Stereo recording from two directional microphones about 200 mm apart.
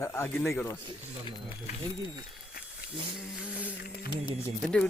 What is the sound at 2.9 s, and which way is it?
Speech, 5° right (ahead or behind).